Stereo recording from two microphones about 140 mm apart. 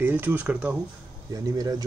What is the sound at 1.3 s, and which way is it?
Speech, 25° right (ahead or behind).